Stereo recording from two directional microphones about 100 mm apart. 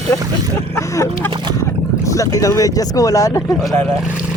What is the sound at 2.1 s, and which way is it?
Speech, 35° left (ahead or behind).